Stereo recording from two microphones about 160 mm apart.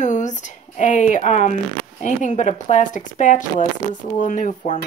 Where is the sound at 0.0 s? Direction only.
50° left (ahead or behind).